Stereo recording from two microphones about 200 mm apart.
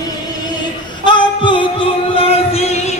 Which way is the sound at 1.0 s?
25° left (ahead or behind).